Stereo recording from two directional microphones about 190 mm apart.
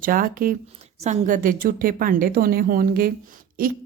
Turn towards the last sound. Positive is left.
turn(degrees=-45)  # may be behind; listen again after turning